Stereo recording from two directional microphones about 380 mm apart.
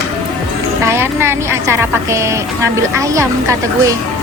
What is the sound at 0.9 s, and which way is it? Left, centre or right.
A woman's voice, centre.